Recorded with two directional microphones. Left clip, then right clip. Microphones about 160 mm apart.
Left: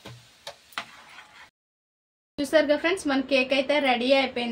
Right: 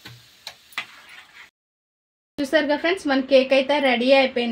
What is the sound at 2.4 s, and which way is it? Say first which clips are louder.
A woman's voice: right 1 dB; 55° right (ahead or behind).